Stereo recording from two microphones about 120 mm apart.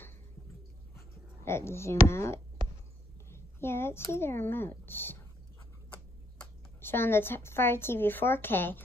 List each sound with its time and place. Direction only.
1.4 s a woman's voice: 20° left (ahead or behind)
6.8 s a woman's voice: 20° left (ahead or behind)